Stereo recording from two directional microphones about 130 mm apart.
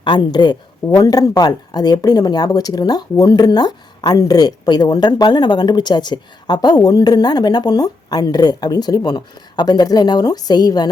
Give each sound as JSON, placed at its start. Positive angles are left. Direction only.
{"t": 0.0, "sound": "a woman's voice", "side_deg": 35}